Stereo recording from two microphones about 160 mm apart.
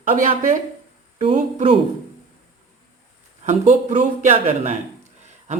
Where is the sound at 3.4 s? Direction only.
50° right (ahead or behind).